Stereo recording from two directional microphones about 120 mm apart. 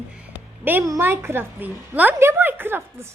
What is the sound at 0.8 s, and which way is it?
A woman's voice, 25° right (ahead or behind).